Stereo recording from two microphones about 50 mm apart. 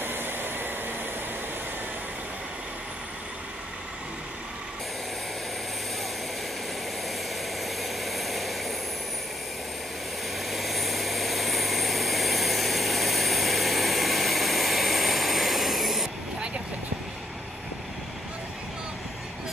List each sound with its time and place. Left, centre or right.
0.0 s vehicle: right
7.6 s vehicle: centre
10.5 s vehicle: centre